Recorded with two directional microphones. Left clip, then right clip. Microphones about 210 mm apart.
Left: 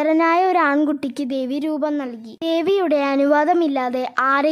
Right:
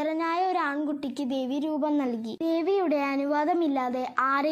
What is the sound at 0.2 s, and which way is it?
Speech, 60° left (ahead or behind).